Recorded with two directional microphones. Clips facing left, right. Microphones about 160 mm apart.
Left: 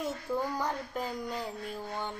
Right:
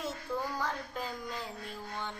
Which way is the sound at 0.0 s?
15° left (ahead or behind).